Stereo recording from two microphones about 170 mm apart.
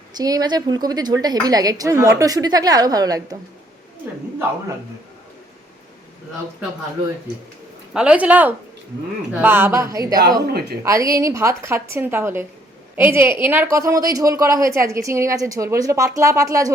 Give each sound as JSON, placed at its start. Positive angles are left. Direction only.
{"t": 0.1, "sound": "a woman's voice", "side_deg": -20}
{"t": 7.9, "sound": "a woman's voice", "side_deg": -5}